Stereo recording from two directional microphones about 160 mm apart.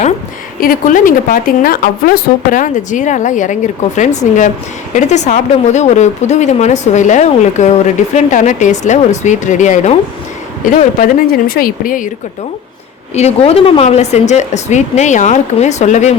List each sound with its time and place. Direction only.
0.6 s speech: 60° left (ahead or behind)
10.7 s speech: 60° left (ahead or behind)
13.1 s speech: 40° left (ahead or behind)